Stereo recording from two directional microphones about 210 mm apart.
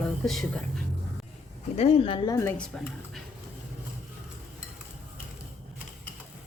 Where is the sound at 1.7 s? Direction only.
30° left (ahead or behind); by 3.2 s 5° left (ahead or behind).